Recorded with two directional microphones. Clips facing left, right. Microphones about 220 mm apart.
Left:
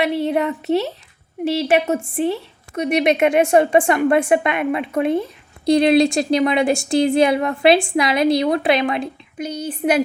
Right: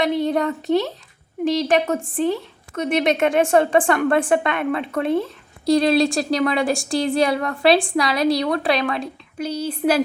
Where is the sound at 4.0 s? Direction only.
10° left (ahead or behind).